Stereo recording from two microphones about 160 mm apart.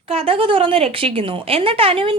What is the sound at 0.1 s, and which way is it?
A woman's voice, 35° right (ahead or behind).